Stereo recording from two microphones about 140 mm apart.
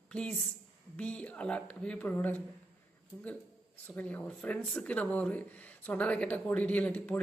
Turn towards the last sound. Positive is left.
turn(degrees=10)  # may be behind; listen again after turning